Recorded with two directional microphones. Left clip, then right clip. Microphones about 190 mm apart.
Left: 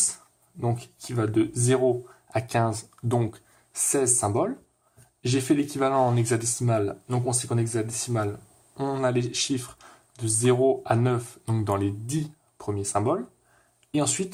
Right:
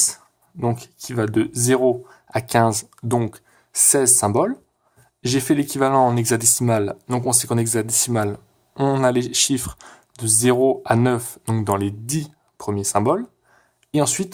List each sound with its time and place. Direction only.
0.6 s speech: 35° right (ahead or behind)